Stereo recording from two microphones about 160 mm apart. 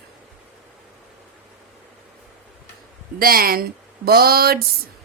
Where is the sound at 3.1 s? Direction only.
65° right (ahead or behind).